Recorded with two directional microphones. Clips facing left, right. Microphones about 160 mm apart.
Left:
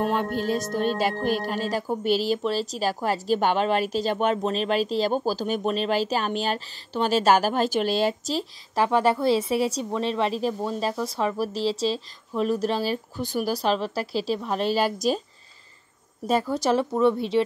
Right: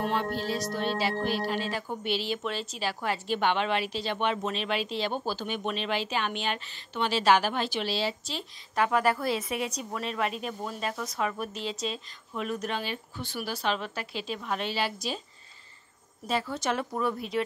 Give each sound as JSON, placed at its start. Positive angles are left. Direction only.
{"t": 0.0, "sound": "music", "side_deg": 50}
{"t": 8.4, "sound": "music", "side_deg": 30}
{"t": 16.3, "sound": "music", "side_deg": 40}
{"t": 17.0, "sound": "speech", "side_deg": 30}